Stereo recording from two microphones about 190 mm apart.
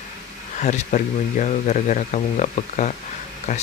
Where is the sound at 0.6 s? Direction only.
40° left (ahead or behind).